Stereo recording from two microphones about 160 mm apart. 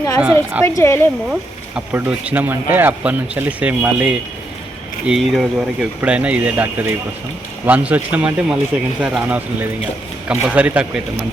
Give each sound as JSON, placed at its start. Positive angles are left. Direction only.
{"t": 0.2, "sound": "speech", "side_deg": -5}
{"t": 0.6, "sound": "speech", "side_deg": 15}
{"t": 1.3, "sound": "speech", "side_deg": -10}